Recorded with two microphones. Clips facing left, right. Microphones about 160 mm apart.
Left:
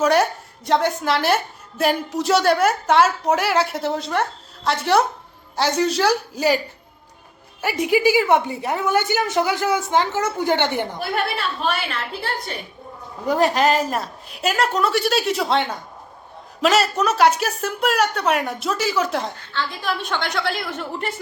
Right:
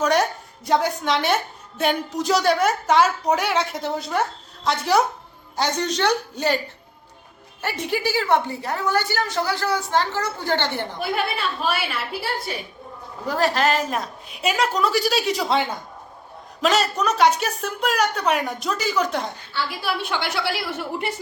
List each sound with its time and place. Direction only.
0.0 s a woman's voice: centre (ahead or behind)
7.6 s a woman's voice: 10° left (ahead or behind)
11.0 s a woman's voice: centre (ahead or behind)
13.2 s a woman's voice: 15° left (ahead or behind)
19.5 s a woman's voice: 10° right (ahead or behind)